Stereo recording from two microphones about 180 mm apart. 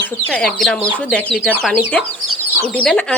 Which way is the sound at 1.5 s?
10° right (ahead or behind).